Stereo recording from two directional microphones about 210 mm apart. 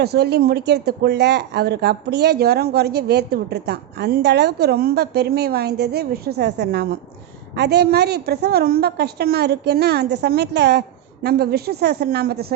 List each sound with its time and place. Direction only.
0.0 s speech: 50° right (ahead or behind)